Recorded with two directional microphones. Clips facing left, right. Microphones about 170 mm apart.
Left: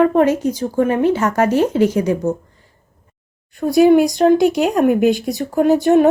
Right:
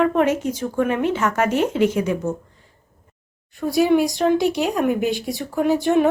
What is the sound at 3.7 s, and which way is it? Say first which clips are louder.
Speech: left 6 dB; 50° left (ahead or behind).